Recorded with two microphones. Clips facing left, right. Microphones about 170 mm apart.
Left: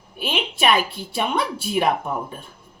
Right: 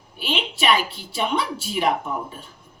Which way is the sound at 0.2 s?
50° left (ahead or behind).